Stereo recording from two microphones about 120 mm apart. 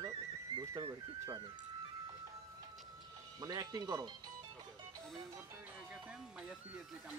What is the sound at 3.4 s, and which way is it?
Speech, 35° right (ahead or behind).